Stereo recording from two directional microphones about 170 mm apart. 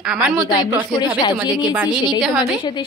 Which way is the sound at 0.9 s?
25° left (ahead or behind).